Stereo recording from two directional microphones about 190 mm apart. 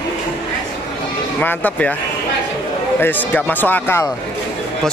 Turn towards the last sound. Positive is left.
turn(degrees=10)  # may be behind; listen again after turning